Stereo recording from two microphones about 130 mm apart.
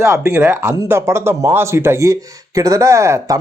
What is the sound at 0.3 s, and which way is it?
Speech, 15° right (ahead or behind).